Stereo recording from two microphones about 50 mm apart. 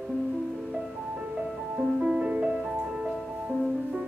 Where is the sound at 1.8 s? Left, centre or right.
Right.